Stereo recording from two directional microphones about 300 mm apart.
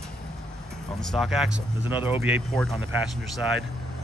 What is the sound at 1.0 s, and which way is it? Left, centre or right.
A man's voice, centre.